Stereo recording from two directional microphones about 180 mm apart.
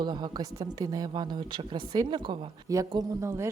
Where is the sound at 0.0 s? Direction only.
25° right (ahead or behind).